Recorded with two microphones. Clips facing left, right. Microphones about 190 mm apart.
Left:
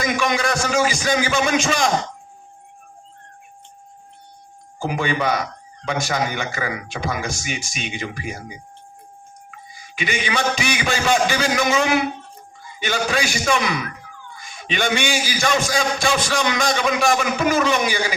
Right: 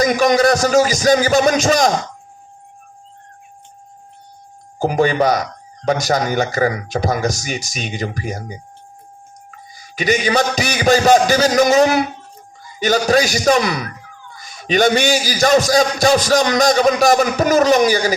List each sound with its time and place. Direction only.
0.0 s speech: 40° right (ahead or behind)
4.8 s speech: 40° right (ahead or behind)